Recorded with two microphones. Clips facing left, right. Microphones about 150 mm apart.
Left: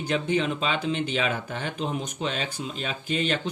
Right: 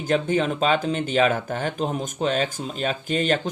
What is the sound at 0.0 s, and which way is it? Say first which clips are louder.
Speech: right 4 dB; 45° right (ahead or behind).